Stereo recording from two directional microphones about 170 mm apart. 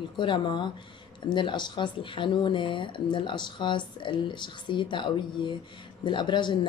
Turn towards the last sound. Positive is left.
turn(degrees=25)  # may be behind; listen again after turning